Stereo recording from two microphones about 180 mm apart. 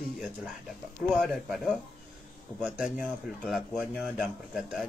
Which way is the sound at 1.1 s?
Centre (ahead or behind).